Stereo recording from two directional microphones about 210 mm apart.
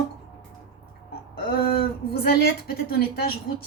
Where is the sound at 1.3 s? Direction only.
45° left (ahead or behind).